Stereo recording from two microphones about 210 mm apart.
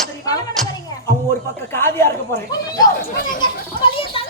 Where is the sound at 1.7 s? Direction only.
10° left (ahead or behind).